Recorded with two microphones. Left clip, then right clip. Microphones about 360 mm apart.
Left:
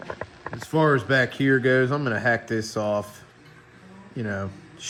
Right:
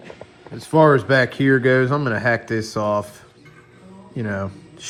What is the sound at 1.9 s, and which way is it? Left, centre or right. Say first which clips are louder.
Speech: right 4 dB; right.